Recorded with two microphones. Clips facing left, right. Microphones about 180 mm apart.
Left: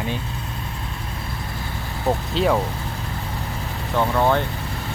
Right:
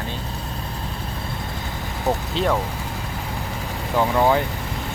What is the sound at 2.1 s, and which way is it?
Speech, centre (ahead or behind).